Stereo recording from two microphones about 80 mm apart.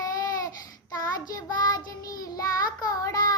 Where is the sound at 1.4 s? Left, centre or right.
Left.